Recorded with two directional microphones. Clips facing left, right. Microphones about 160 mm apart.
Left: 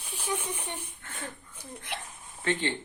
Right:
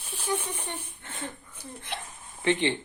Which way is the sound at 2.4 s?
20° right (ahead or behind).